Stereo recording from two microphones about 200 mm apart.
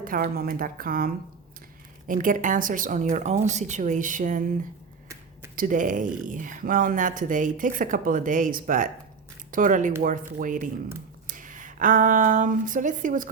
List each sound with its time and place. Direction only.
0.0 s a woman's voice: 45° right (ahead or behind)
5.5 s speech: 40° right (ahead or behind)